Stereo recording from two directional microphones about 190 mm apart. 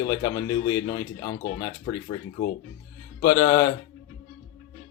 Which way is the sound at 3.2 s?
20° left (ahead or behind).